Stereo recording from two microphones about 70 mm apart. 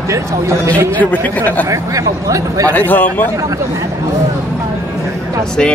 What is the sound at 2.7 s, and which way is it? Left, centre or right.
Speech, left.